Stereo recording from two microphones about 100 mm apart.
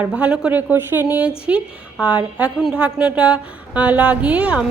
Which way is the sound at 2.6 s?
10° right (ahead or behind).